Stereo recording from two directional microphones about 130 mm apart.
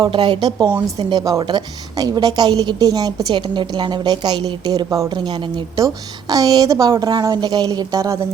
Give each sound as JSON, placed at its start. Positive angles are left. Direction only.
{"t": 0.0, "sound": "a woman's voice", "side_deg": -40}